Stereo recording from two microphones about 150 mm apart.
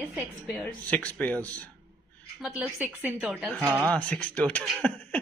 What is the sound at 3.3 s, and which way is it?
Speech, centre (ahead or behind).